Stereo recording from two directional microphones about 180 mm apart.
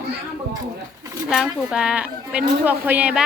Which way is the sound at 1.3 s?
Centre (ahead or behind).